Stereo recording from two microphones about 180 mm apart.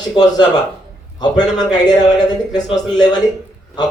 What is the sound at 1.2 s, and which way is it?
A man's voice, 20° left (ahead or behind).